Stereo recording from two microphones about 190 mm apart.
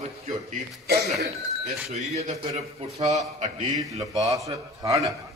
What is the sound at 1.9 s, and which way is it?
A man's voice, 35° right (ahead or behind).